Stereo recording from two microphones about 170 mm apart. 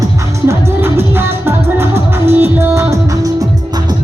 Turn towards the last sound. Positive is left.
turn(degrees=-15)  # may be behind; listen again after turning